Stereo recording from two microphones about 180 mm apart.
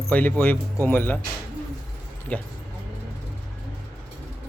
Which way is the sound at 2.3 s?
10° left (ahead or behind).